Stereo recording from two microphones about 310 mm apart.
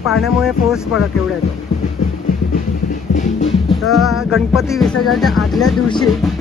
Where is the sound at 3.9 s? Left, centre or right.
Centre.